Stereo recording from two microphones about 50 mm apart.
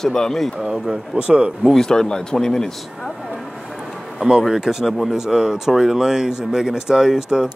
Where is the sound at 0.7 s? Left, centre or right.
Centre.